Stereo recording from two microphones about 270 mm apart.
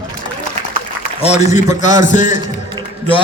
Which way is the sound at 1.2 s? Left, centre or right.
Left.